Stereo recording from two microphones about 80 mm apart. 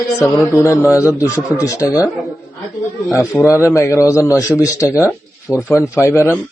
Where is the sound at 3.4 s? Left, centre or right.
Left.